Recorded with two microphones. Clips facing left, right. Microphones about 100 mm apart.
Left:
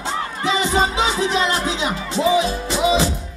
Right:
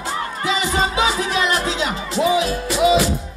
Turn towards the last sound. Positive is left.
turn(degrees=25)  # may be behind; listen again after turning